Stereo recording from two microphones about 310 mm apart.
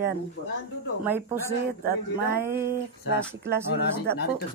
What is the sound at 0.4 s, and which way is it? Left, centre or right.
Speech, left.